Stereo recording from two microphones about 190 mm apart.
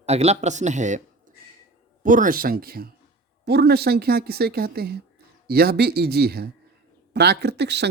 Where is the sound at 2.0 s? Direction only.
45° right (ahead or behind).